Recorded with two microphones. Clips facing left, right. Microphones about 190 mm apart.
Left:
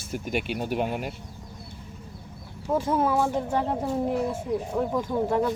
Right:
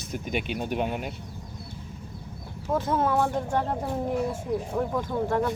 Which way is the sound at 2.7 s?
10° left (ahead or behind).